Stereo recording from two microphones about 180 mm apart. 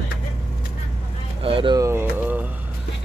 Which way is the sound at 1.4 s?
30° right (ahead or behind).